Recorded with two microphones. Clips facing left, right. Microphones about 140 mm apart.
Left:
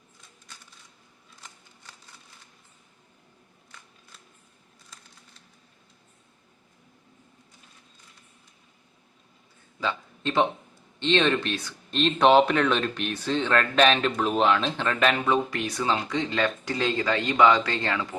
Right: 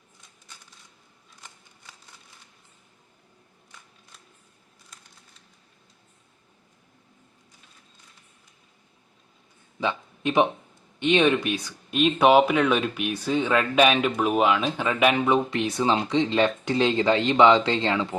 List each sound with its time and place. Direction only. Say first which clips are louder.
9.8 s speech: right 3 dB; 15° right (ahead or behind)